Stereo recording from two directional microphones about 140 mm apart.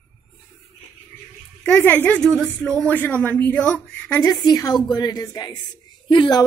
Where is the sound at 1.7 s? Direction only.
15° left (ahead or behind).